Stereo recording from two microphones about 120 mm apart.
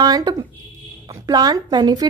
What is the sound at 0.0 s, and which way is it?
Speech, 35° right (ahead or behind).